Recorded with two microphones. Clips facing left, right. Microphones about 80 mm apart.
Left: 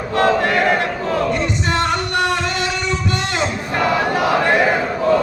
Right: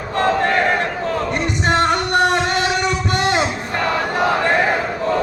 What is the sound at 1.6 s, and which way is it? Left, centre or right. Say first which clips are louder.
Music: right 6 dB; right.